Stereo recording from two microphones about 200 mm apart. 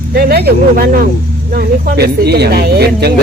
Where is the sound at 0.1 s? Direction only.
50° right (ahead or behind).